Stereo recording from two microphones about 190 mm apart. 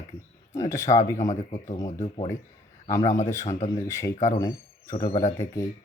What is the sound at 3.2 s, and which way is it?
Speech, 15° left (ahead or behind).